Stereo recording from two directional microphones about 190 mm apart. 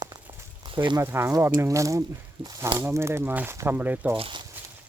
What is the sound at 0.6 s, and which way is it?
Speech, 25° right (ahead or behind).